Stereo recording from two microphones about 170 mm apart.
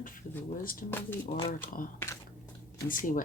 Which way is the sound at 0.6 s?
55° left (ahead or behind).